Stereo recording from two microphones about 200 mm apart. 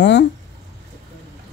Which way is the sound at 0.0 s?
60° left (ahead or behind).